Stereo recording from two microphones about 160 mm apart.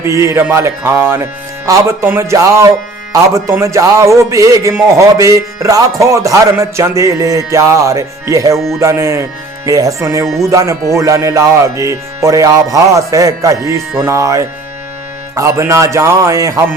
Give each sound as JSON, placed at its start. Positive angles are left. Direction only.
{"t": 0.0, "sound": "speech", "side_deg": -20}
{"t": 3.1, "sound": "music", "side_deg": -20}
{"t": 8.8, "sound": "speech", "side_deg": -20}
{"t": 9.6, "sound": "music", "side_deg": -20}